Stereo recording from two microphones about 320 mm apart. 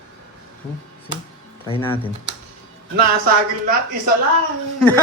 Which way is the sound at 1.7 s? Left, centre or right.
Centre.